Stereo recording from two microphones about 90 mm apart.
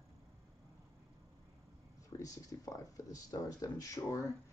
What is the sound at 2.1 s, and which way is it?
Speech, 40° left (ahead or behind).